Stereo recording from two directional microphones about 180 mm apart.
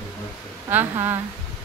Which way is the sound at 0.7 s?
10° right (ahead or behind).